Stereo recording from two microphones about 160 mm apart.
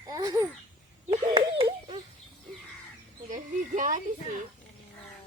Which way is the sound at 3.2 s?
55° right (ahead or behind).